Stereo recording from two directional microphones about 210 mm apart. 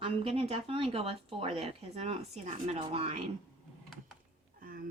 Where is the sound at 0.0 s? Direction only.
30° right (ahead or behind).